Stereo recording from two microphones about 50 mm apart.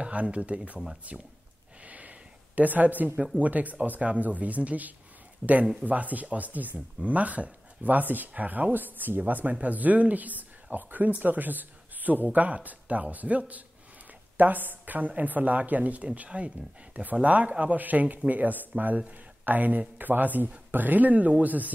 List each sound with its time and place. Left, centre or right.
0.0 s speech: right
1.8 s a sound: right
3.3 s speech: right
5.4 s speech: centre
5.8 s speech: right